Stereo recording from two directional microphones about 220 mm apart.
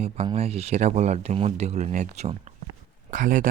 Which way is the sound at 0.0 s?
30° right (ahead or behind).